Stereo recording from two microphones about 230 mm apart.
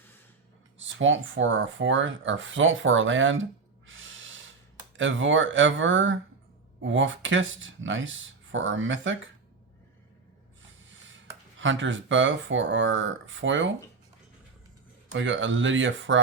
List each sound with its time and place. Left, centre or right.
0.8 s speech: right
3.8 s snort: right
4.9 s speech: right
10.7 s snort: right
11.6 s speech: right
15.1 s speech: right